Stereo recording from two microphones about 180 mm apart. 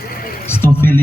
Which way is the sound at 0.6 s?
10° left (ahead or behind).